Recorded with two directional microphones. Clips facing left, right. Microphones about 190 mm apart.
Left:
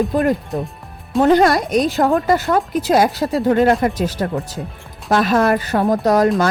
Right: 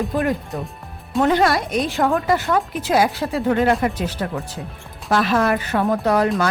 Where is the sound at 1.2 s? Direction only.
40° left (ahead or behind).